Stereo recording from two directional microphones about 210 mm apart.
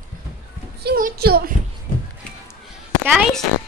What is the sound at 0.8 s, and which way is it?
Speech, 45° right (ahead or behind).